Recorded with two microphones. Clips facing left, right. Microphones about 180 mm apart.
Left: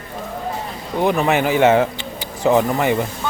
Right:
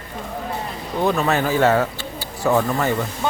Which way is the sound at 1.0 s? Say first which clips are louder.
Left 2 dB; 15° left (ahead or behind).